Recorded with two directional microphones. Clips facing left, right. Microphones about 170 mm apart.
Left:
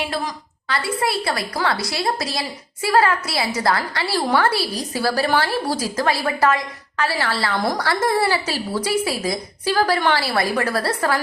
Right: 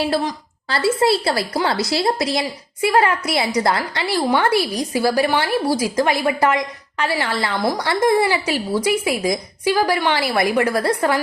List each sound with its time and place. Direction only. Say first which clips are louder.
0.0 s a woman's voice: right 5 dB; 30° right (ahead or behind)